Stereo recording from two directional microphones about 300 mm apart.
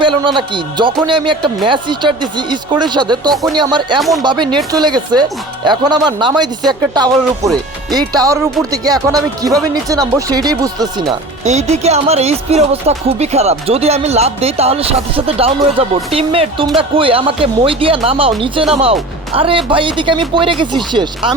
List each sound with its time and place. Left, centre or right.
0.0 s a man's voice: centre